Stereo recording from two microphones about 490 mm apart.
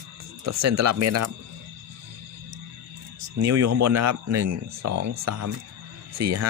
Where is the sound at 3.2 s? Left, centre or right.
Right.